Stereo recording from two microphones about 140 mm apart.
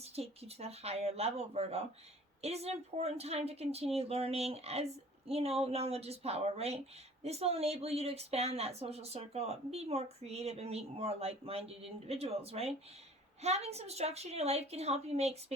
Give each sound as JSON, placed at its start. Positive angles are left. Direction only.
{"t": 0.0, "sound": "speech", "side_deg": -45}